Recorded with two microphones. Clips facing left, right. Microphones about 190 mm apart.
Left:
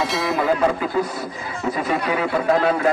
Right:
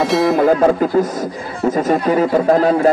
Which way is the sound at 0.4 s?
45° right (ahead or behind).